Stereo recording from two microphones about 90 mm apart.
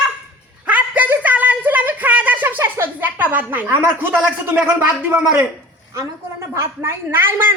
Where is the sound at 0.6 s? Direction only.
15° right (ahead or behind).